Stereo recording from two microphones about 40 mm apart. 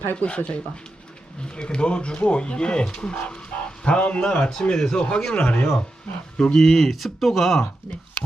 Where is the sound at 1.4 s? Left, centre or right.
Left.